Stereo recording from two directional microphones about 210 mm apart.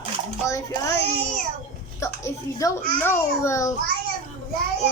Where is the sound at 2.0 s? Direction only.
15° left (ahead or behind).